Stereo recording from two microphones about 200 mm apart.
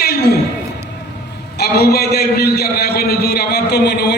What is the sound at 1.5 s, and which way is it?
A man's voice, 50° left (ahead or behind).